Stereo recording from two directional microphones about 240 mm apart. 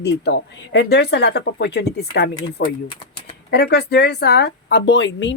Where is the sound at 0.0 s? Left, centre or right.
Left.